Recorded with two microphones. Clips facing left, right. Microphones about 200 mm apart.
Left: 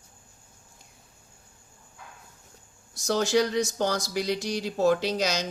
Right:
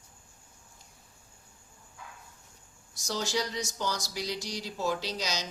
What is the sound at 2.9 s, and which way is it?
Speech, 55° left (ahead or behind).